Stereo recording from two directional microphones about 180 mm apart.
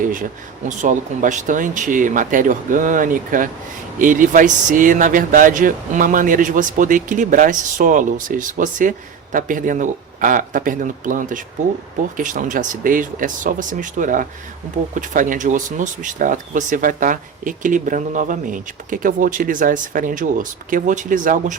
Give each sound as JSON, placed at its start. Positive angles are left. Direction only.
{"t": 0.0, "sound": "speech", "side_deg": -50}